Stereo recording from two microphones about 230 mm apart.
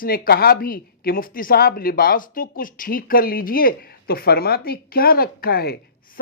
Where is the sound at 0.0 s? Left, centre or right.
Left.